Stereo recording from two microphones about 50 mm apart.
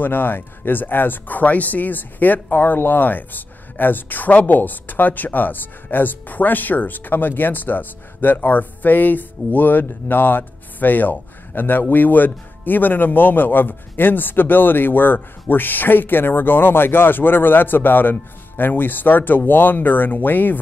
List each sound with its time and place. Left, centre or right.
0.0 s speech: left